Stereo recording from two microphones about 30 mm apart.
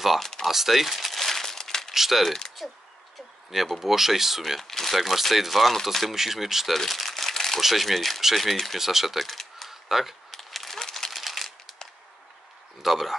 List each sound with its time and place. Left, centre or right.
0.2 s speech: centre
0.5 s crumpling: centre
1.9 s speech: centre
4.6 s crumpling: centre
4.9 s speech: centre
6.0 s speech: centre
6.9 s crumpling: centre
7.6 s speech: centre
8.7 s speech: centre
9.7 s camera: centre
10.3 s a sound: centre
10.8 s a sound: centre
11.1 s a sound: centre
12.8 s speech: centre